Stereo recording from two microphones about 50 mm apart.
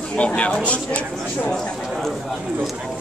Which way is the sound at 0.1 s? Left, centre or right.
Left.